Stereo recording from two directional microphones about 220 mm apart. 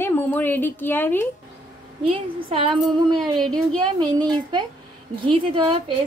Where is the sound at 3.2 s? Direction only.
Centre (ahead or behind).